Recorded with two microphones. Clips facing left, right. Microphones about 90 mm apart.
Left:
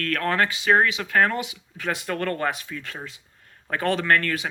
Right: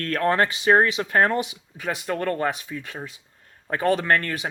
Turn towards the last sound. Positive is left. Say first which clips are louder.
# left 1 dB
turn(degrees=-20)  # may be behind; listen again after turning